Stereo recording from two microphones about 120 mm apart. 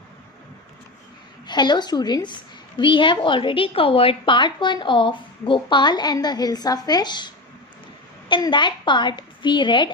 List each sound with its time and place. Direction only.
1.5 s a woman's voice: 35° left (ahead or behind)